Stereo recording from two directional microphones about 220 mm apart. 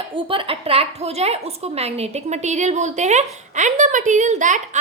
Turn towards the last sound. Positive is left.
turn(degrees=-35)  # may be behind; listen again after turning